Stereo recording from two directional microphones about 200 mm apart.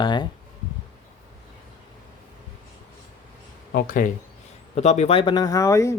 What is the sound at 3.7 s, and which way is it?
Speech, 45° left (ahead or behind).